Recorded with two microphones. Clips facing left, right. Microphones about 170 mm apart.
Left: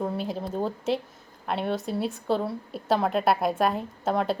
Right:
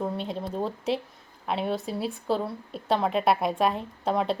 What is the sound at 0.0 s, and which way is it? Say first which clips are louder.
A woman's voice: left 1 dB; centre (ahead or behind).